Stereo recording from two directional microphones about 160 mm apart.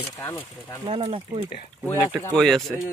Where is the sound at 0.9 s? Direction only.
35° right (ahead or behind).